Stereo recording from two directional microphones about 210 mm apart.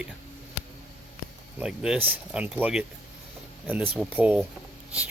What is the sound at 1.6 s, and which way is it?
Speech, 5° right (ahead or behind).